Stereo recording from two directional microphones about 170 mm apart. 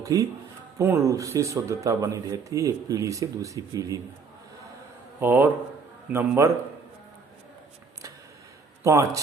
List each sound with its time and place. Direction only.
0.0 s speech: 20° right (ahead or behind)
5.2 s a man's voice: 10° right (ahead or behind)
8.8 s a man's voice: 15° right (ahead or behind)